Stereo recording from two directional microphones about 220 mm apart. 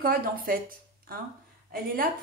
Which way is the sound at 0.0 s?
40° right (ahead or behind).